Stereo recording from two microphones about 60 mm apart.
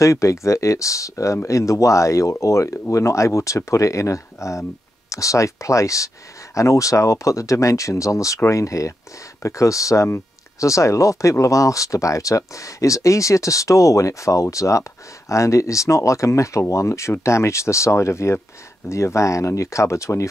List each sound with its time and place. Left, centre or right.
0.0 s speech: left